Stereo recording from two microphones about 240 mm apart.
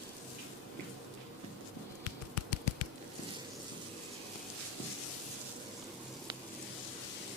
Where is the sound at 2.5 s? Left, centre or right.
Left.